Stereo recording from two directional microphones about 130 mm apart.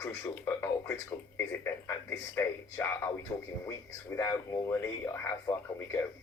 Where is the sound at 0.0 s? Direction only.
20° left (ahead or behind).